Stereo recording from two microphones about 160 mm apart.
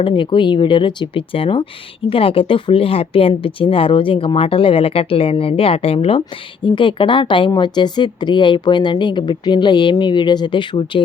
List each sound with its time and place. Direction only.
0.0 s a woman's voice: 30° left (ahead or behind)